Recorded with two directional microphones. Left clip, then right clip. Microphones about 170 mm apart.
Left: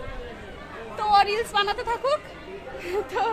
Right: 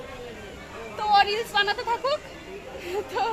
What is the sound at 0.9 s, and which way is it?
Speech, 5° left (ahead or behind).